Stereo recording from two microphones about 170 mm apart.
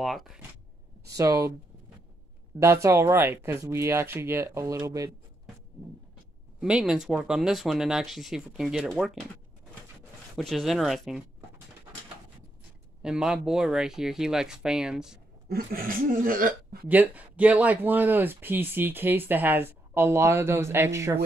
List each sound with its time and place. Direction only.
0.0 s speech: centre (ahead or behind)
1.0 s speech: 20° right (ahead or behind)
2.6 s speech: 15° right (ahead or behind)
6.6 s speech: 5° right (ahead or behind)
10.3 s speech: centre (ahead or behind)
13.0 s speech: 5° right (ahead or behind)
15.4 s speech: 60° right (ahead or behind)
16.8 s speech: 10° right (ahead or behind)